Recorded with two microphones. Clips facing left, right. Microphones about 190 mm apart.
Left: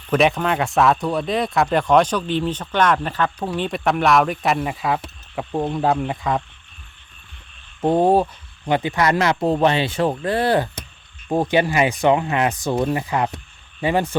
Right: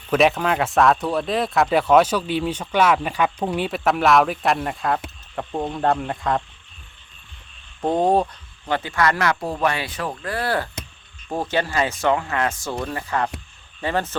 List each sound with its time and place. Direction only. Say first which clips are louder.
0.1 s speech: even; centre (ahead or behind)
7.8 s speech: left 3 dB; 5° left (ahead or behind)
8.7 s speech: left 3 dB; 20° left (ahead or behind)